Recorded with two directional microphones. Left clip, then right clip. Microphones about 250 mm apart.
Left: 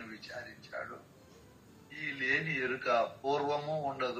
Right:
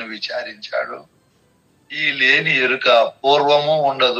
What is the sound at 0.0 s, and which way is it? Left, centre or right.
Speech, right.